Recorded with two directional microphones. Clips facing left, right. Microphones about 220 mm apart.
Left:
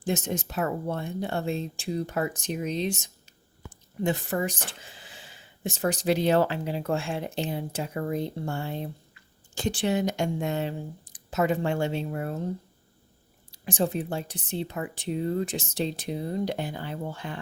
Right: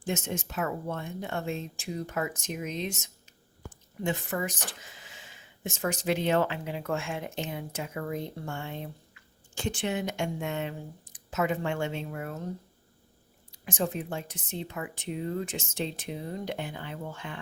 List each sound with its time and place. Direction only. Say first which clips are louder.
0.0 s speech: left 4 dB; 35° left (ahead or behind)
13.5 s speech: left 4 dB; 35° left (ahead or behind)